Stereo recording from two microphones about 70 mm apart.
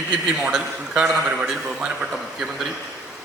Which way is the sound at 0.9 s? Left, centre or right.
Centre.